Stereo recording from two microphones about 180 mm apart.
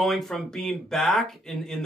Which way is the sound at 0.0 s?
Centre (ahead or behind).